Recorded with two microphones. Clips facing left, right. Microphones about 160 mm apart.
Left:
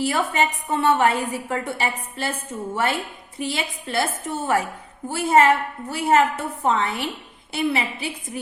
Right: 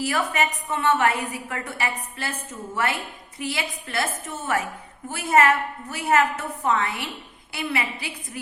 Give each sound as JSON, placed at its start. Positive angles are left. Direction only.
{"t": 0.0, "sound": "a woman's voice", "side_deg": 30}